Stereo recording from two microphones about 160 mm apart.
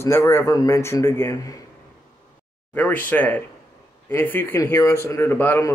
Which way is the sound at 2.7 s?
10° left (ahead or behind).